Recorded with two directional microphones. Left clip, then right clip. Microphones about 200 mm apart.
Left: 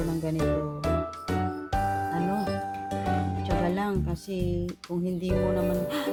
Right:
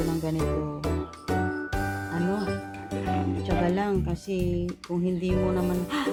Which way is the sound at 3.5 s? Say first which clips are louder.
Right 2 dB; 5° left (ahead or behind).